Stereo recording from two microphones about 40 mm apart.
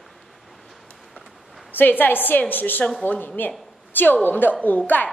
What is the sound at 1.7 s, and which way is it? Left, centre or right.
A woman's voice, left.